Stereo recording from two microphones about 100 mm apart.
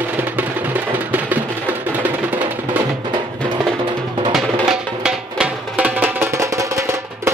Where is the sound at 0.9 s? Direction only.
20° right (ahead or behind).